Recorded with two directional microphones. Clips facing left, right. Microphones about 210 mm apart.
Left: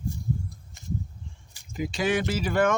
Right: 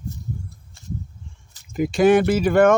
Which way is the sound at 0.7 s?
15° left (ahead or behind).